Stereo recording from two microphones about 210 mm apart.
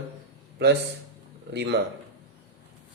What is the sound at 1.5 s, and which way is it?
Speech, 50° right (ahead or behind).